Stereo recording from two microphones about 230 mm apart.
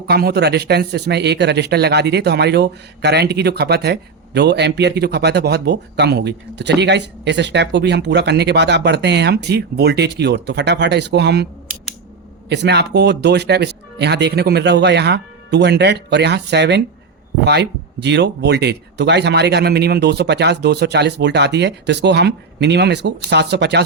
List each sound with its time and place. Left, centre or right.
0.1 s speech: right
12.5 s speech: right